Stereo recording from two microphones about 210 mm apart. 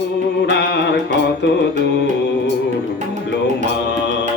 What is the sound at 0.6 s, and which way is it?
Music, 50° left (ahead or behind).